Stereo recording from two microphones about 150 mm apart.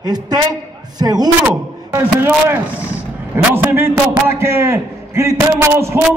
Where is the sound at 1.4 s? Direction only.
15° right (ahead or behind).